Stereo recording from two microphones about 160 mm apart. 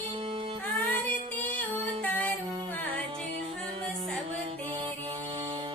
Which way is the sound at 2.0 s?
10° left (ahead or behind).